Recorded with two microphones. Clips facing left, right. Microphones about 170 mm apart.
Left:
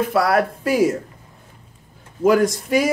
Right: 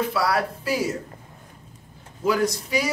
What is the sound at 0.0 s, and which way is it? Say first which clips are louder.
Speech: left 5 dB; 50° left (ahead or behind).